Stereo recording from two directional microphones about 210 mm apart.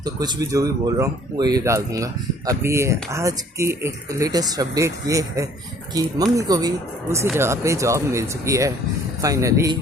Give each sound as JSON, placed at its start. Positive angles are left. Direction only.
{"t": 0.0, "sound": "speech", "side_deg": -20}